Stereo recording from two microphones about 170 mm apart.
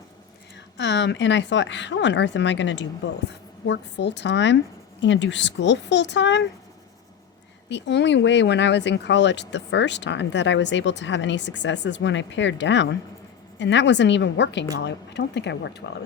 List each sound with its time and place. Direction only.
0.8 s speech: 90° left
7.7 s speech: 90° left